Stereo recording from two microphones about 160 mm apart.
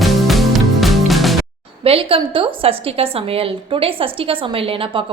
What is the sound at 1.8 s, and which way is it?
A woman's voice, 35° right (ahead or behind).